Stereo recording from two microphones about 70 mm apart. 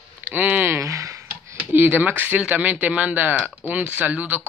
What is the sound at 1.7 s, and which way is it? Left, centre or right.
Speech, right.